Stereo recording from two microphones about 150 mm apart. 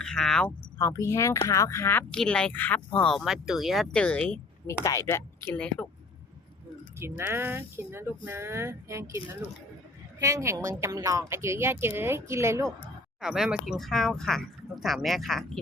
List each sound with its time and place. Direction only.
0.0 s speech: 5° left (ahead or behind)
0.8 s speech: 20° left (ahead or behind)
3.0 s speech: centre (ahead or behind)
4.8 s speech: 20° left (ahead or behind)
7.0 s a woman's voice: 15° right (ahead or behind)
13.2 s speech: 5° right (ahead or behind)